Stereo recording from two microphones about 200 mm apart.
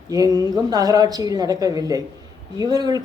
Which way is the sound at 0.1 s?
20° right (ahead or behind).